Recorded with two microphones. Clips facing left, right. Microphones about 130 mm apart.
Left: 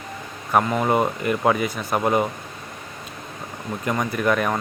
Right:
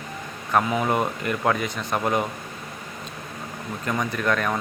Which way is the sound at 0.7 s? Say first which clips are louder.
Left 3 dB; centre (ahead or behind).